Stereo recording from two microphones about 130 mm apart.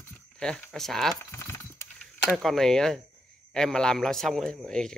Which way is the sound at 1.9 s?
5° left (ahead or behind).